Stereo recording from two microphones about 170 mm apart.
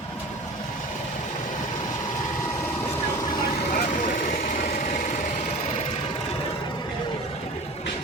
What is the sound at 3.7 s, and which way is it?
Vehicle, 50° left (ahead or behind).